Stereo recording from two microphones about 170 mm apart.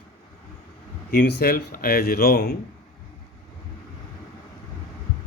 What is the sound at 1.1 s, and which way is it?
Speech, 70° left (ahead or behind).